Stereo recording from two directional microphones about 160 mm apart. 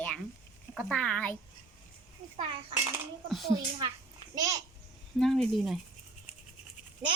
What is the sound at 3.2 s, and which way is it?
Speech, centre (ahead or behind).